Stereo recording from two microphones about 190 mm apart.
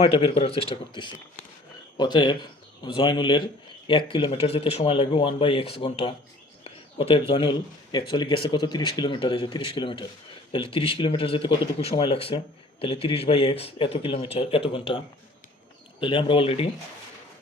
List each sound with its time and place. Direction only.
0.0 s speech: 30° left (ahead or behind)